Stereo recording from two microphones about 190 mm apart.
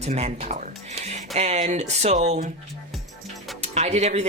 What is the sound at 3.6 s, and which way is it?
Speech, 35° right (ahead or behind).